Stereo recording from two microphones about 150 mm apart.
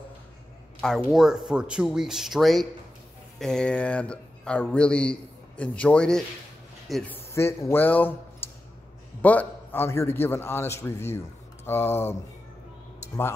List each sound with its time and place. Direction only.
0.7 s a man's voice: centre (ahead or behind)
7.2 s a man's voice: 15° left (ahead or behind)